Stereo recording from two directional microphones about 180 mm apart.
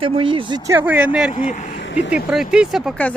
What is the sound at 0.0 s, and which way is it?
Speech, 30° right (ahead or behind).